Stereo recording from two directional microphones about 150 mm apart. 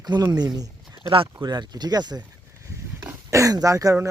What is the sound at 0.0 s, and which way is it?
Speech, 25° right (ahead or behind).